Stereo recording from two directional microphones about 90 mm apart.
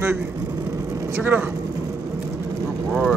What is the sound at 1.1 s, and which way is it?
Speech, 20° right (ahead or behind).